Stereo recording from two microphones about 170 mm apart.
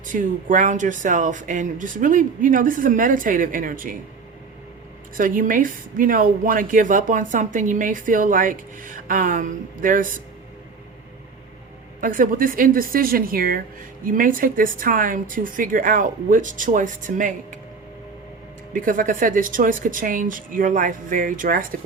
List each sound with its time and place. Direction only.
0.0 s a woman's voice: 50° right (ahead or behind)
5.1 s a woman's voice: 55° right (ahead or behind)
11.9 s a woman's voice: 55° right (ahead or behind)
18.7 s a woman's voice: 55° right (ahead or behind)